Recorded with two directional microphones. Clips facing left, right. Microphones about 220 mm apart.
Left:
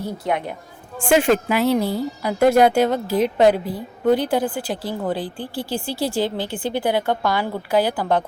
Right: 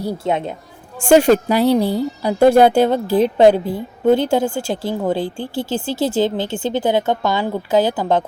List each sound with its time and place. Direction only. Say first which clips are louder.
0.3 s a woman's voice: right 3 dB; 25° right (ahead or behind)
0.9 s a woman's voice: right 5 dB; 45° right (ahead or behind); by 8.2 s 20° right (ahead or behind)